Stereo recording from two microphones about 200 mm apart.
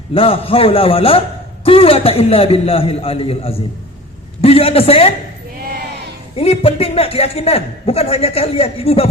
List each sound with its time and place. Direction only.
0.1 s a man's voice: 25° left (ahead or behind)
6.3 s a man's voice: 30° left (ahead or behind)